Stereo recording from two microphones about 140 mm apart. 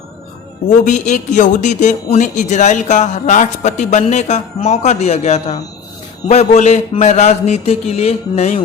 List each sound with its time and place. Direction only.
0.9 s a man's voice: 60° left (ahead or behind)